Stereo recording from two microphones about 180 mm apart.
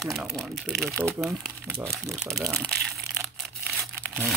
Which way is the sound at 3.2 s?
Centre (ahead or behind).